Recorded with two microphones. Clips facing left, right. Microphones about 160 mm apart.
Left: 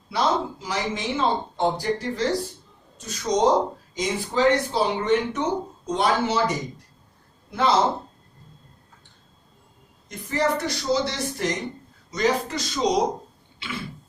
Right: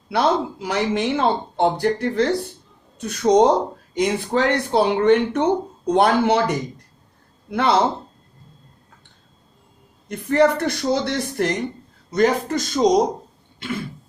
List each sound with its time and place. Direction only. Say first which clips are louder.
0.1 s speech: right 4 dB; 60° right (ahead or behind)
10.1 s speech: right 7 dB; 60° right (ahead or behind)